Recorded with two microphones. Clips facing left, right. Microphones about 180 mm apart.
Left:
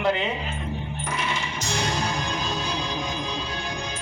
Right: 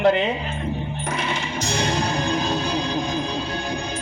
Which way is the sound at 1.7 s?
65° right (ahead or behind).